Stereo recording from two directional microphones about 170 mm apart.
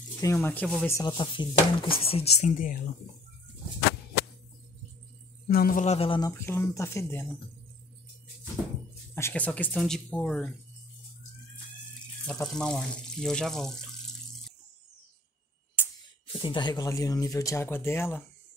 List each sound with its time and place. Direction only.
0.2 s speech: 15° left (ahead or behind)
0.9 s speech: 30° left (ahead or behind)
1.5 s speech: 60° left (ahead or behind)
2.0 s speech: 35° left (ahead or behind)
5.5 s speech: 60° left (ahead or behind)
5.9 s speech: 30° left (ahead or behind)
6.2 s speech: 15° left (ahead or behind)
9.1 s speech: 10° left (ahead or behind)
12.3 s speech: 5° left (ahead or behind)
15.8 s music: 10° left (ahead or behind)
16.3 s speech: 30° left (ahead or behind)